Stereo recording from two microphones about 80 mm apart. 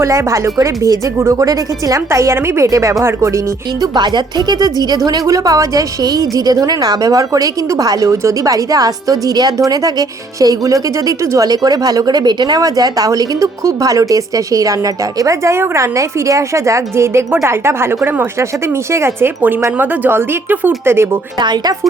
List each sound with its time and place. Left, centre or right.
0.0 s a woman's voice: right
3.9 s a woman's voice: right
21.4 s speech: right